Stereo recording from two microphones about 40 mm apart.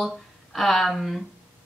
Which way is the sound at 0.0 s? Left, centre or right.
Centre.